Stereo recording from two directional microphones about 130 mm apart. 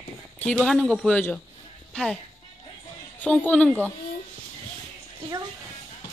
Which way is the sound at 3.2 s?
10° left (ahead or behind).